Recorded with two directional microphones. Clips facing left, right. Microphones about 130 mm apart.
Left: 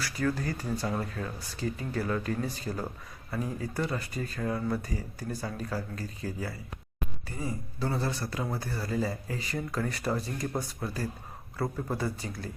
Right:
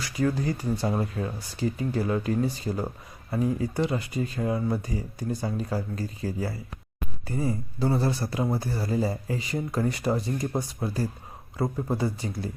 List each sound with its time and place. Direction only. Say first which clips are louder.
0.0 s speech: right 4 dB; 20° right (ahead or behind)